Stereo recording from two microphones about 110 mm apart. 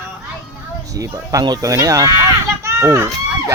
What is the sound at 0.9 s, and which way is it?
Speech, 35° right (ahead or behind).